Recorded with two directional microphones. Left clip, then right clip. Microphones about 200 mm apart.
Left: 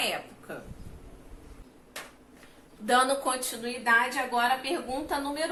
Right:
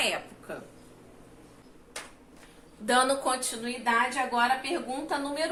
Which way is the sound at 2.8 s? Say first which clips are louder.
Even; 15° right (ahead or behind).